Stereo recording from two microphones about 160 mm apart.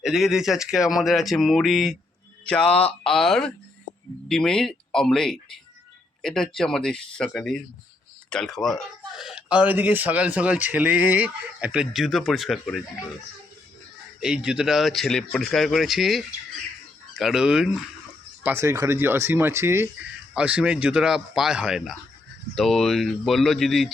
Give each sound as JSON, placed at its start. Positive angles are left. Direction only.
{"t": 0.0, "sound": "speech", "side_deg": -5}
{"t": 14.2, "sound": "speech", "side_deg": -5}
{"t": 18.4, "sound": "speech", "side_deg": -15}